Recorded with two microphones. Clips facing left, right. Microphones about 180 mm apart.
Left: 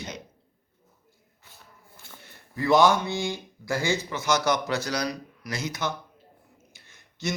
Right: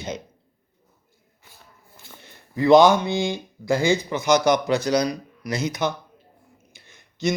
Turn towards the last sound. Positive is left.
turn(degrees=-15)  # may be behind; listen again after turning